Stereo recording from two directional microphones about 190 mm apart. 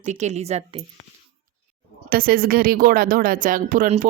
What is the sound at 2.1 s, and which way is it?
A woman's voice, 50° right (ahead or behind).